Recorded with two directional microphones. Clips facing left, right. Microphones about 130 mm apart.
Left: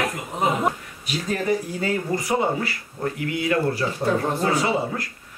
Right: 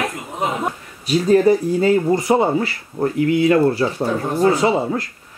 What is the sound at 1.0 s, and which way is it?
Speech, 35° right (ahead or behind).